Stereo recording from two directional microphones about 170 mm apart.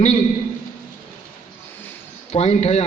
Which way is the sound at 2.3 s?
40° left (ahead or behind).